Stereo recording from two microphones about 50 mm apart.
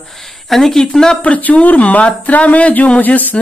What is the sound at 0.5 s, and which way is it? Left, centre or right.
Speech, centre.